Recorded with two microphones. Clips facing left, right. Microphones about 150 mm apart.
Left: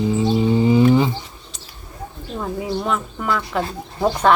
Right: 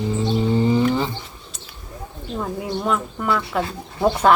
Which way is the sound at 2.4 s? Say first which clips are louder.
Left 1 dB; centre (ahead or behind).